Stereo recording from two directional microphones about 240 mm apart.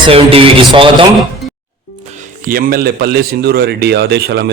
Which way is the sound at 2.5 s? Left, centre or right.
Right.